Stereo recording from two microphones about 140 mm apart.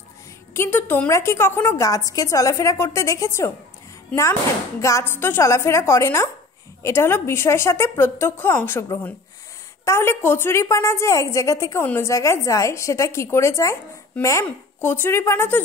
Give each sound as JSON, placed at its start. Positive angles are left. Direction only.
{"t": 0.6, "sound": "a woman's voice", "side_deg": 15}
{"t": 9.8, "sound": "a woman's voice", "side_deg": 15}